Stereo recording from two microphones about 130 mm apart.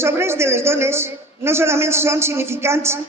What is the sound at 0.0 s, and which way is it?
Speech, 20° right (ahead or behind).